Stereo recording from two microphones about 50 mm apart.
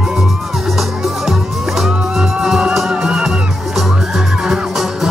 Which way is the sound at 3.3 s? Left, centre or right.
Centre.